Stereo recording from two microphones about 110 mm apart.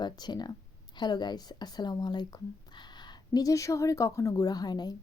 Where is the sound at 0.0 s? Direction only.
40° left (ahead or behind).